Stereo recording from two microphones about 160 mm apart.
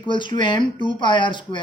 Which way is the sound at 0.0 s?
30° left (ahead or behind).